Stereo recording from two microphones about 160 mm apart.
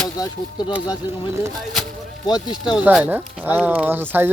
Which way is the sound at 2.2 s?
30° left (ahead or behind).